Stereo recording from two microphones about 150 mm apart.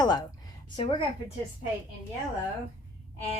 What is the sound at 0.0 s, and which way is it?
Speech, 25° left (ahead or behind).